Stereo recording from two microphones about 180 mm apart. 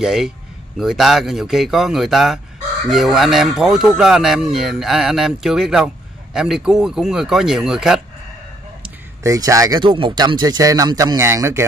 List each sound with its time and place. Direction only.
0.0 s speech: centre (ahead or behind)
9.2 s speech: 20° right (ahead or behind)